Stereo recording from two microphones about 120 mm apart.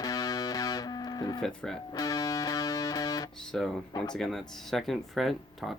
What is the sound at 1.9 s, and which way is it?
Music, 30° left (ahead or behind).